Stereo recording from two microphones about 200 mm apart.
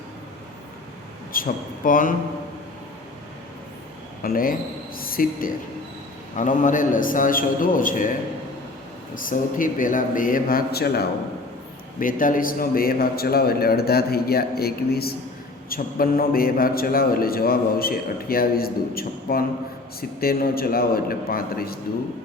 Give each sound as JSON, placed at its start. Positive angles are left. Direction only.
{"t": 1.3, "sound": "a man's voice", "side_deg": 45}
{"t": 4.2, "sound": "a man's voice", "side_deg": 45}
{"t": 9.1, "sound": "a man's voice", "side_deg": 45}